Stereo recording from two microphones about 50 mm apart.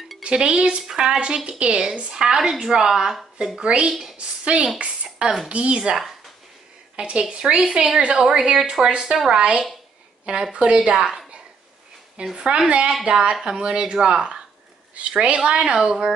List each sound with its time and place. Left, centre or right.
0.2 s a woman's voice: centre
3.5 s a woman's voice: right
4.7 s a sound: right
5.5 s a woman's voice: right
7.0 s a woman's voice: right
9.4 s a woman's voice: right
11.0 s a woman's voice: centre
12.4 s a woman's voice: centre